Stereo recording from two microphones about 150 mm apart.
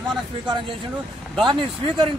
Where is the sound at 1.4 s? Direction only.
30° right (ahead or behind).